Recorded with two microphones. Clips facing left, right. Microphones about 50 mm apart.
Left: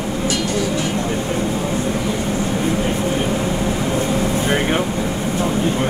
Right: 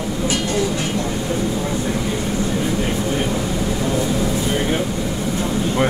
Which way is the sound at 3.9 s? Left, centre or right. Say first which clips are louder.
Even; left.